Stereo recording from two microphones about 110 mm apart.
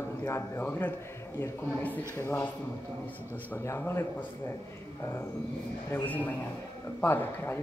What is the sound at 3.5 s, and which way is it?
Speech, 25° left (ahead or behind).